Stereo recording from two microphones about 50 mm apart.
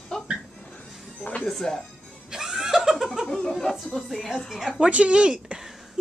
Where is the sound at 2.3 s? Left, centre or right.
Centre.